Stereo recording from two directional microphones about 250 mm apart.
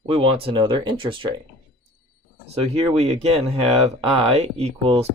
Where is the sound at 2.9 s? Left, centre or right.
Right.